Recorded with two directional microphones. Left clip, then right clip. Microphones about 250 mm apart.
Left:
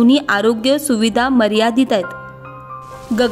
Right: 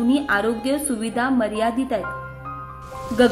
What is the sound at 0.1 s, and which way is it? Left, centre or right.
Speech, left.